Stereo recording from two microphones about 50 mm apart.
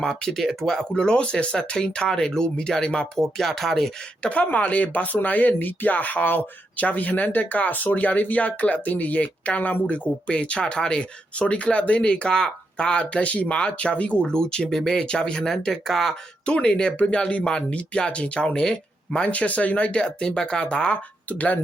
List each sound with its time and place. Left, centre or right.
0.0 s speech: centre
4.2 s speech: left; by 15.0 s centre
15.0 s speech: centre
16.6 s speech: centre
21.2 s speech: left